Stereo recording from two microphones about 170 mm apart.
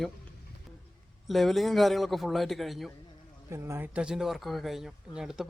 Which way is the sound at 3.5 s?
15° right (ahead or behind).